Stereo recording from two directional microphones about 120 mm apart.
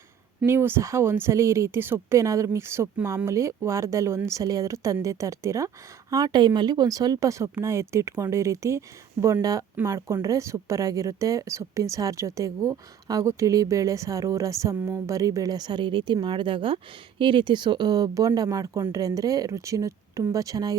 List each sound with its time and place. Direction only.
0.4 s speech: 20° right (ahead or behind)